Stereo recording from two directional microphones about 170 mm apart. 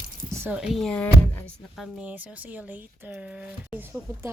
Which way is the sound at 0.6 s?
Centre (ahead or behind).